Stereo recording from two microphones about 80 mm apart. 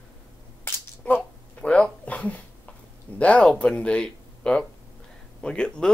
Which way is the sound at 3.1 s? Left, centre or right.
Centre.